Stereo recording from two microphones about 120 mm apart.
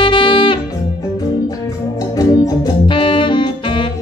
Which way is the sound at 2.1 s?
30° left (ahead or behind).